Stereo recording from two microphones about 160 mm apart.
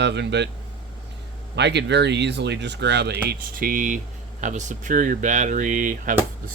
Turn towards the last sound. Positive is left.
turn(degrees=-55)  # may be behind; listen again after turning